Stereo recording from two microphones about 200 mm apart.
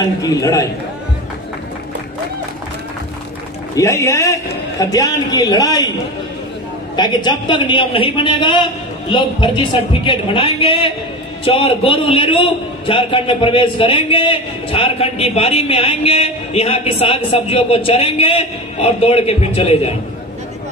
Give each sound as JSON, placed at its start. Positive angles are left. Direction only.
{"t": 0.2, "sound": "a man's voice", "side_deg": 15}
{"t": 3.7, "sound": "a man's voice", "side_deg": 15}
{"t": 7.0, "sound": "a man's voice", "side_deg": 20}